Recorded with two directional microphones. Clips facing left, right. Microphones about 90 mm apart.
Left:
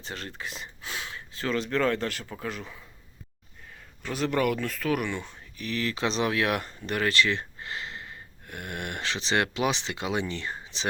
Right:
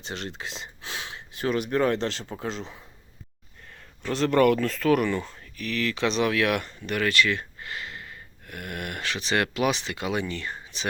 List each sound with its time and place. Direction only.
0.0 s speech: 20° right (ahead or behind)
4.1 s speech: 10° left (ahead or behind)
5.5 s speech: 30° left (ahead or behind)